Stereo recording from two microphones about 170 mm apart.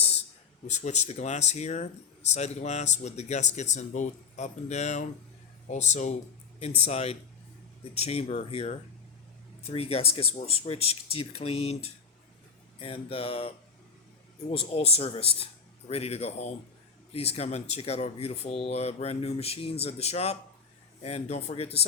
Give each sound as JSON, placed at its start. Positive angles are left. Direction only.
{"t": 0.7, "sound": "speech", "side_deg": 40}
{"t": 14.5, "sound": "speech", "side_deg": 35}